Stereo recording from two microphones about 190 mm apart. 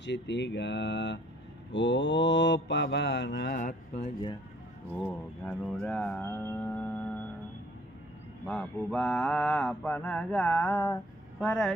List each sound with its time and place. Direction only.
0.0 s mantra: 65° left (ahead or behind)
3.5 s speech: 40° left (ahead or behind)
4.9 s speech: 10° left (ahead or behind)
8.5 s mantra: 5° left (ahead or behind)
11.4 s mantra: 5° left (ahead or behind)